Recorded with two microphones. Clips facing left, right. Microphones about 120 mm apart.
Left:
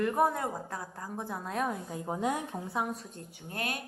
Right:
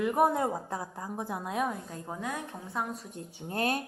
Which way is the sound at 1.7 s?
10° left (ahead or behind).